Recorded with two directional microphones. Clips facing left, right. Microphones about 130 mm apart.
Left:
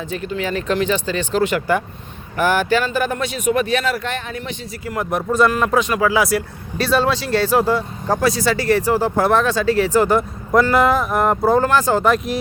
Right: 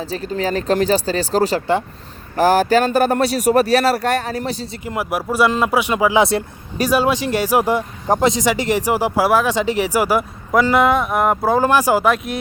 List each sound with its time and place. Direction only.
0.1 s a man's voice: 35° right (ahead or behind)
4.9 s speech: 10° right (ahead or behind)
6.7 s speech: 15° right (ahead or behind)